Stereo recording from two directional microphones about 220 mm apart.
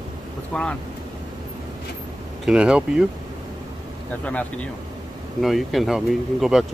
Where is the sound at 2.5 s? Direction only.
5° right (ahead or behind).